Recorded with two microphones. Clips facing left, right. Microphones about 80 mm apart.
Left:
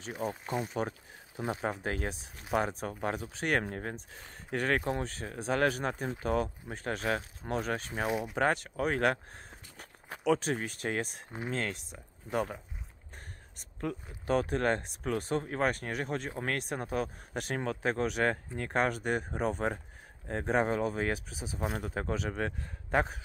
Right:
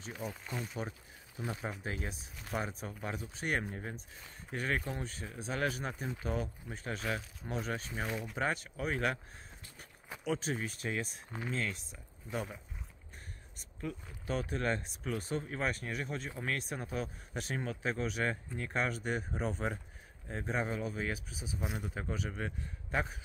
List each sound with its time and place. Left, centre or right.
0.2 s speech: left
0.8 s speech: left
1.4 s speech: left
1.8 s speech: left
2.9 s speech: left
8.1 s speech: centre
8.4 s speech: left
12.4 s speech: left
13.7 s speech: left
21.5 s speech: left